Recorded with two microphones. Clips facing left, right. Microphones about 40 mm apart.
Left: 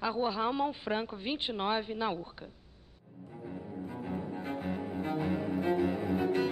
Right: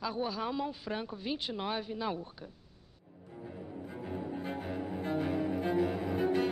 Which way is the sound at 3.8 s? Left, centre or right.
Centre.